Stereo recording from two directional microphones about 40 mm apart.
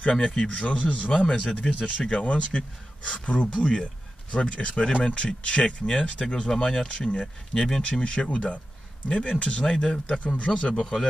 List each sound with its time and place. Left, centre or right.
0.1 s speech: centre
0.5 s speech: left; by 7.8 s centre
7.8 s speech: left
9.7 s speech: centre
10.2 s speech: left
10.5 s speech: centre